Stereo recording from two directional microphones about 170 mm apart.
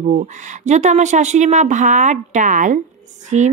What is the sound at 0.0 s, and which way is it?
A woman's voice, 45° right (ahead or behind).